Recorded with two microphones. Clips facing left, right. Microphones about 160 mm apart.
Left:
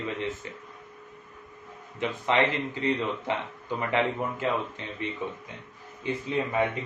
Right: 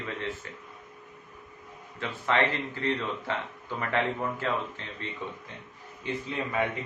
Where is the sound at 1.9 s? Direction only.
20° left (ahead or behind).